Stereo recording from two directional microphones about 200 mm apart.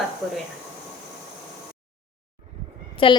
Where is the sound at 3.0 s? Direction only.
25° left (ahead or behind).